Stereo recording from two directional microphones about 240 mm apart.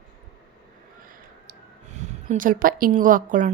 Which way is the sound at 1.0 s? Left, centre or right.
Right.